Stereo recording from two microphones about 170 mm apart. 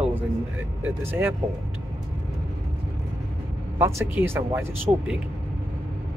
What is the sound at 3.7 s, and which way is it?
Speech, 15° right (ahead or behind).